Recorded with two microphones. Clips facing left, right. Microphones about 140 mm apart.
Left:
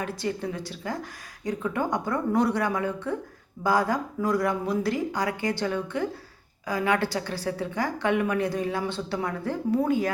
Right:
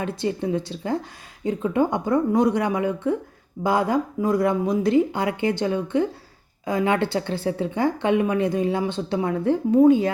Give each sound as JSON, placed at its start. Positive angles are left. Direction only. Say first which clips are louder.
{"t": 0.0, "sound": "a woman's voice", "louder": "right 4 dB", "side_deg": -20}